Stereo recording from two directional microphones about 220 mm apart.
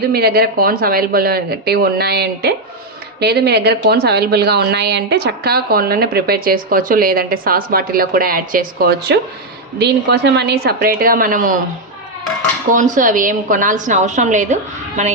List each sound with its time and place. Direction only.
0.1 s a woman's voice: 45° right (ahead or behind)
12.7 s a woman's voice: 35° right (ahead or behind)